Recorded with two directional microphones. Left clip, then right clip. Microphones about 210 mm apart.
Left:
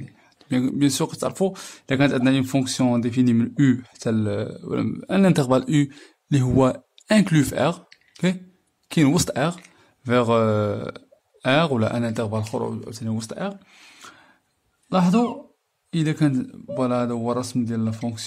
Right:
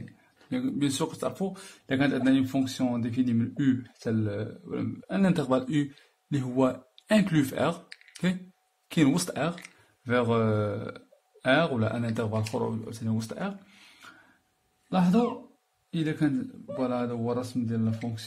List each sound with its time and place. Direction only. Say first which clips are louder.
0.5 s speech: left 8 dB; 40° left (ahead or behind)
13.7 s a sound: left 6 dB; 40° left (ahead or behind)
14.9 s speech: left 5 dB; 45° left (ahead or behind)